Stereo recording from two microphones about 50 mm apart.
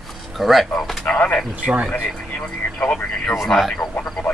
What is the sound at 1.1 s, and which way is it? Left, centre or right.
Speech, left.